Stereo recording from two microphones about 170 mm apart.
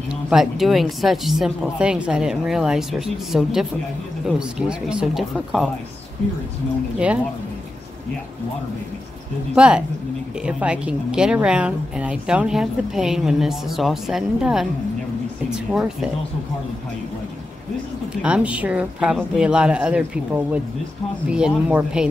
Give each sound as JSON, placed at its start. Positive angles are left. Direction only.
{"t": 0.1, "sound": "a woman's voice", "side_deg": -5}
{"t": 9.6, "sound": "a woman's voice", "side_deg": -5}
{"t": 18.2, "sound": "a woman's voice", "side_deg": -5}